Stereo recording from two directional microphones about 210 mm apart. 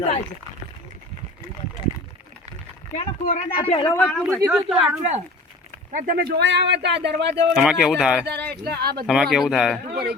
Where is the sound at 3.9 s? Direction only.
10° left (ahead or behind).